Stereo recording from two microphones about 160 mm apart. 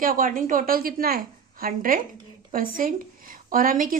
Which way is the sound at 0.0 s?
60° right (ahead or behind).